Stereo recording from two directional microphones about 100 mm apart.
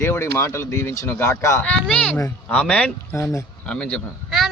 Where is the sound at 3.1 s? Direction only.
30° left (ahead or behind).